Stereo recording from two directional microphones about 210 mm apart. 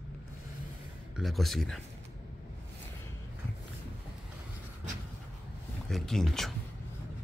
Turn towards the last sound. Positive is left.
turn(degrees=0)  # may be behind; listen again after turning